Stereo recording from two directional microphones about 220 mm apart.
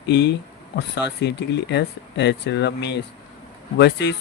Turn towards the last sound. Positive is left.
turn(degrees=50)  # may be behind; listen again after turning